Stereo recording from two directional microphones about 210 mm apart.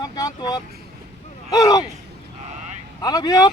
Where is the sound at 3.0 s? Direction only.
20° left (ahead or behind).